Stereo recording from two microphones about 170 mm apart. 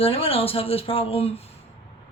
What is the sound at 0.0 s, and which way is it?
Speech, 35° left (ahead or behind).